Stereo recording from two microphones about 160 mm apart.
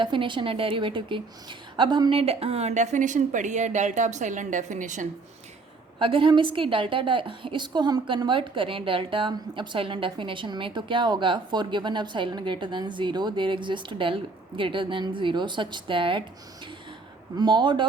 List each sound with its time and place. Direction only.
0.0 s a woman's voice: 30° right (ahead or behind); by 5.0 s 50° right (ahead or behind)
6.0 s a woman's voice: 30° right (ahead or behind)
17.3 s speech: 30° right (ahead or behind)